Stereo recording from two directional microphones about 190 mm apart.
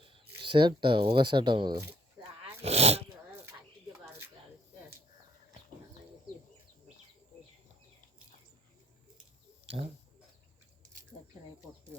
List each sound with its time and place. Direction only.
0.1 s speech: 25° right (ahead or behind)
2.6 s speech: 35° right (ahead or behind)
9.6 s speech: 30° right (ahead or behind)